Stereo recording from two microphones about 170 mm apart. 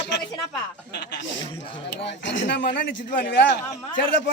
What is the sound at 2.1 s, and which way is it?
A man's voice, 90° left.